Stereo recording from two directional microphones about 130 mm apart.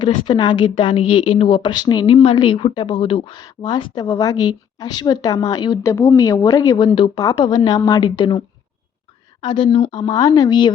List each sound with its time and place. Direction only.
0.0 s a woman's voice: 35° left (ahead or behind)